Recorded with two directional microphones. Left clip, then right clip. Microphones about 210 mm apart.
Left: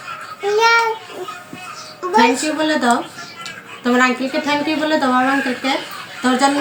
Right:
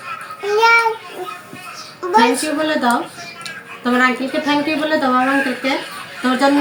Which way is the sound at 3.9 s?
30° left (ahead or behind).